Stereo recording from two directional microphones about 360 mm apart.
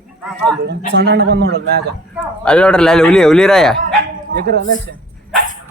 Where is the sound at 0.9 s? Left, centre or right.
Right.